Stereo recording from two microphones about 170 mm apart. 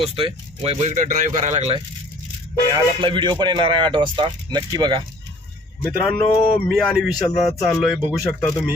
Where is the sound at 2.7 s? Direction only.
25° right (ahead or behind).